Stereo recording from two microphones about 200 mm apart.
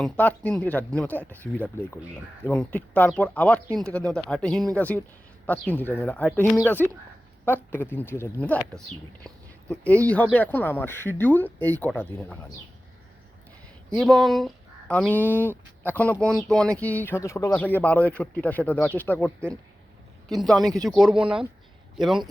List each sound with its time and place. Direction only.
0.0 s speech: 10° left (ahead or behind)
13.9 s a man's voice: centre (ahead or behind)